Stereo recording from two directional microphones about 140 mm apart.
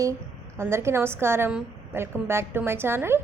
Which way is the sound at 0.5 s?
20° right (ahead or behind).